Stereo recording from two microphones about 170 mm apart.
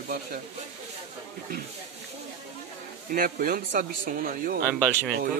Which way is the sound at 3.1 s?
55° right (ahead or behind).